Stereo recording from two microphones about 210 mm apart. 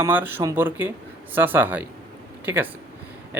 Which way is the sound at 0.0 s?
10° right (ahead or behind).